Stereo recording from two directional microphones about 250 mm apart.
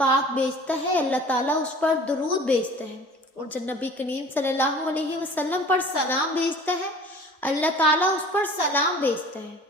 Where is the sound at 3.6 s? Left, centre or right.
Centre.